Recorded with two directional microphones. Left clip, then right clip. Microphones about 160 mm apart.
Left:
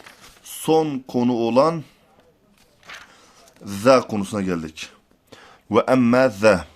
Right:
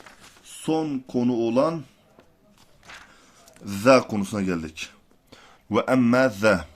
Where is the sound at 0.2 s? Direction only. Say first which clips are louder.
Left 5 dB; 50° left (ahead or behind).